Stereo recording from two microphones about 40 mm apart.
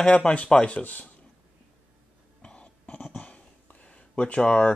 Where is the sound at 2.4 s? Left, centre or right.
Left.